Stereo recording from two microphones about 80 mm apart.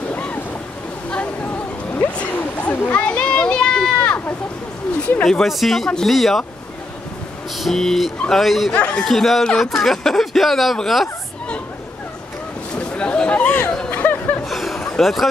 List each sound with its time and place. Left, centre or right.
0.1 s waves: centre
2.0 s splash: centre
5.2 s speech: centre
7.5 s speech: centre
8.7 s a man's voice: centre
9.0 s speech: centre
12.7 s chatter: centre
14.4 s a sound: centre
14.9 s speech: centre